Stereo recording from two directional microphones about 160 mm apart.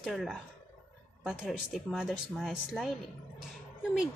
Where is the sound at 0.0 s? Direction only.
Centre (ahead or behind).